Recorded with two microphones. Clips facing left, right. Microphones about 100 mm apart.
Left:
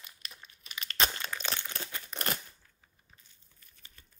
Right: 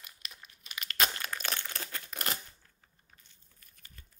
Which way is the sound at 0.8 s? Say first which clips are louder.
Even; 30° left (ahead or behind).